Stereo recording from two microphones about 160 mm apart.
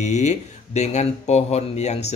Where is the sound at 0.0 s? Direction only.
45° left (ahead or behind).